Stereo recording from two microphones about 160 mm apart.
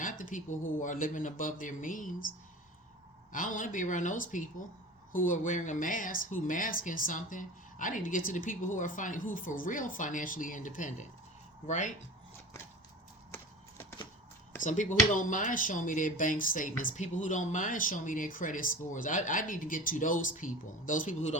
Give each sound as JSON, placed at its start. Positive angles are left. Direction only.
{"t": 0.0, "sound": "speech", "side_deg": 55}
{"t": 3.3, "sound": "speech", "side_deg": 55}
{"t": 14.6, "sound": "speech", "side_deg": 50}